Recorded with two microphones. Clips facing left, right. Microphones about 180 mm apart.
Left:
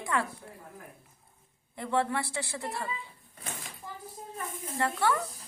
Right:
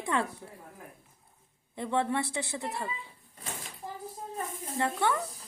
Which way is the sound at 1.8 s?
20° right (ahead or behind).